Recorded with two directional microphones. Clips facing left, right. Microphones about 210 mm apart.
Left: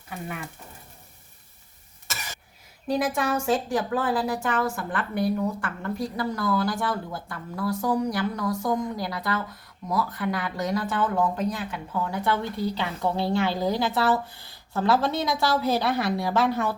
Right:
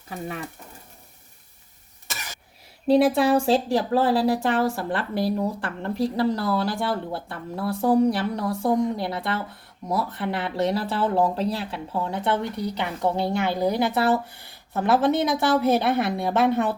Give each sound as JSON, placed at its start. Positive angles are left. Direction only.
{"t": 0.1, "sound": "speech", "side_deg": -35}
{"t": 2.8, "sound": "a woman's voice", "side_deg": -30}